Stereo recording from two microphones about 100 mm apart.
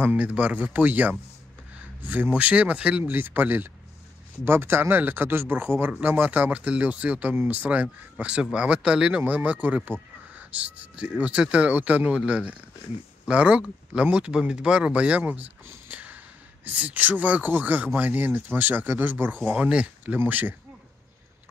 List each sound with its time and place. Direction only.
0.0 s speech: 15° right (ahead or behind)